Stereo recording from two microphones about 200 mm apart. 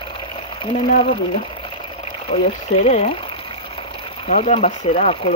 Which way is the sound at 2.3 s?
30° left (ahead or behind).